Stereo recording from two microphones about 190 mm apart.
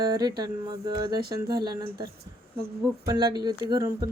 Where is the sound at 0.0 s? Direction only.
20° right (ahead or behind).